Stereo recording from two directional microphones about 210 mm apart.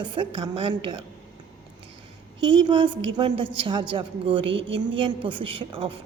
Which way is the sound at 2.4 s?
20° right (ahead or behind).